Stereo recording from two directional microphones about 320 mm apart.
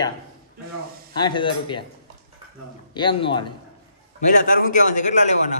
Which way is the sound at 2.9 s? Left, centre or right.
Centre.